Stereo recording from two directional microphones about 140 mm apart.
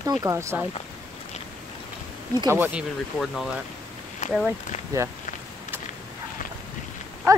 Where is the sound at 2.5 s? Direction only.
15° right (ahead or behind).